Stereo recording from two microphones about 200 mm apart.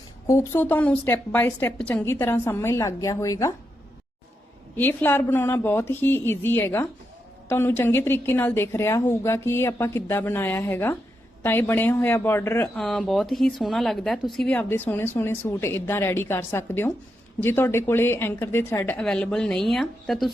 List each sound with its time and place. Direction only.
0.3 s speech: 10° left (ahead or behind)
4.8 s speech: 10° left (ahead or behind)